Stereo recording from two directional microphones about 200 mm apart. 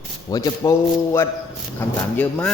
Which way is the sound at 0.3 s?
20° left (ahead or behind).